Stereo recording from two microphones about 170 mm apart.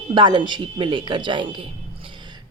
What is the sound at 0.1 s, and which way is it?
A woman's voice, 30° right (ahead or behind).